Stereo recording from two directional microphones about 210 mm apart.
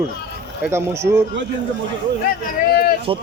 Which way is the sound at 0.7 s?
10° right (ahead or behind).